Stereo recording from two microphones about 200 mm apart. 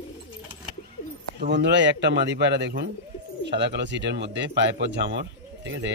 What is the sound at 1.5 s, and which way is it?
Speech, 60° right (ahead or behind).